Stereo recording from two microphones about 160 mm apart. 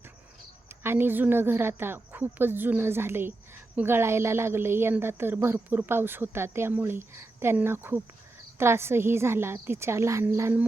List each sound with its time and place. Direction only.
0.8 s a woman's voice: 15° right (ahead or behind)